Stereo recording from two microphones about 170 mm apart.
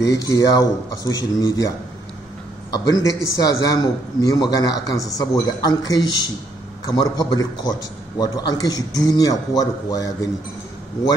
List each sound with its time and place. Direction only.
0.1 s a man's voice: 20° left (ahead or behind)
2.7 s a man's voice: 20° left (ahead or behind)